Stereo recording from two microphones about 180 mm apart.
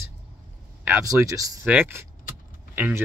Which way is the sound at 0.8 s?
15° right (ahead or behind).